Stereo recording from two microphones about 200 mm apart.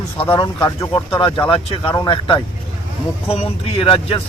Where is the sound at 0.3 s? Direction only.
20° left (ahead or behind).